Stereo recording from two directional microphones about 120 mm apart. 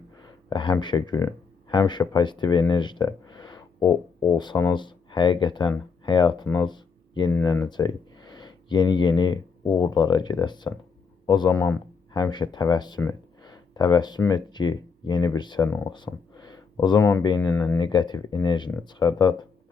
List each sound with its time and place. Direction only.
0.2 s speech: 40° left (ahead or behind)
6.7 s a sound: 40° left (ahead or behind)
7.4 s speech: 25° left (ahead or behind)
7.7 s speech: 35° left (ahead or behind)
11.5 s speech: 25° left (ahead or behind)
12.1 s speech: 40° left (ahead or behind)
13.4 s a sound: 35° left (ahead or behind)
14.3 s speech: 35° left (ahead or behind)
17.5 s speech: 20° left (ahead or behind)
17.7 s speech: 40° left (ahead or behind)